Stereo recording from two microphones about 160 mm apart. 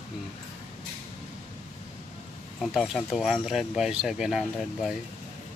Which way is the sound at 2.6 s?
Centre (ahead or behind).